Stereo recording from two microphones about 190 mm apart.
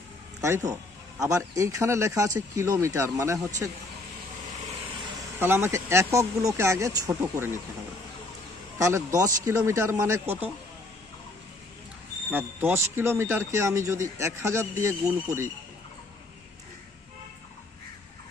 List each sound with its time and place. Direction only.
0.4 s speech: 15° right (ahead or behind)
5.4 s speech: 10° right (ahead or behind)
8.8 s speech: 15° right (ahead or behind)
12.3 s speech: 10° right (ahead or behind)